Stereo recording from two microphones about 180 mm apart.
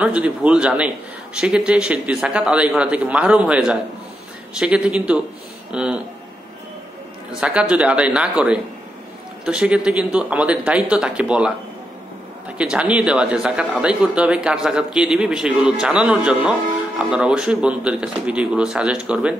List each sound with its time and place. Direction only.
0.0 s a man's voice: 5° right (ahead or behind)
7.3 s a man's voice: 5° right (ahead or behind)
12.5 s a man's voice: 5° right (ahead or behind)